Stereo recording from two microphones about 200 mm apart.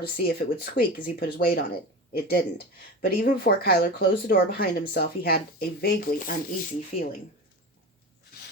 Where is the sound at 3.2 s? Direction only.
50° left (ahead or behind).